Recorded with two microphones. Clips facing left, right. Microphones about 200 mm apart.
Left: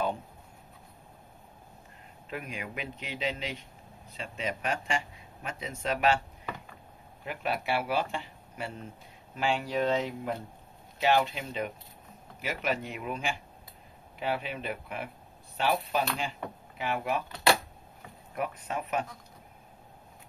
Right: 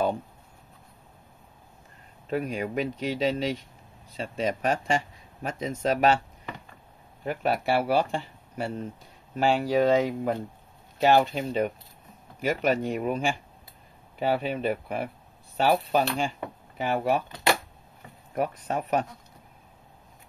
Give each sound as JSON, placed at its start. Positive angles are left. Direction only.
{"t": 2.2, "sound": "speech", "side_deg": -35}
{"t": 7.2, "sound": "speech", "side_deg": -40}
{"t": 18.3, "sound": "speech", "side_deg": -40}